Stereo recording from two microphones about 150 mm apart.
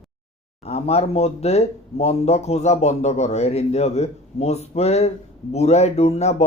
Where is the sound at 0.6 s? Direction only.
45° left (ahead or behind).